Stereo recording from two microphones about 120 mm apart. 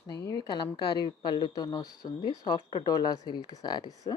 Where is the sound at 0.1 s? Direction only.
30° left (ahead or behind).